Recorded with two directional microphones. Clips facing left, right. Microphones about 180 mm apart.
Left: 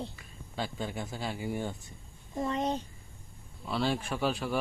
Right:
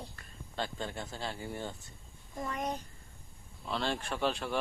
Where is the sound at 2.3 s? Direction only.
25° left (ahead or behind).